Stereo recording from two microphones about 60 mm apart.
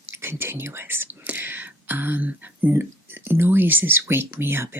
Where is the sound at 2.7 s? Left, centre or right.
Right.